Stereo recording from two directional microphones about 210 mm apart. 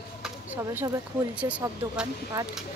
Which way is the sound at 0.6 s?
10° right (ahead or behind).